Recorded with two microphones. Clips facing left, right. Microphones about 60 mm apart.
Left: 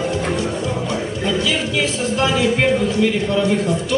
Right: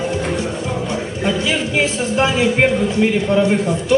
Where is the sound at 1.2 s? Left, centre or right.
Right.